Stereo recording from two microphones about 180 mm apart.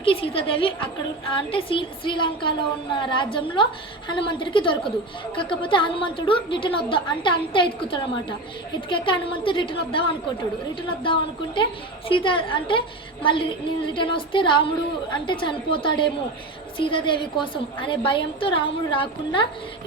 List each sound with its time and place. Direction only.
0.0 s a woman's voice: 30° left (ahead or behind)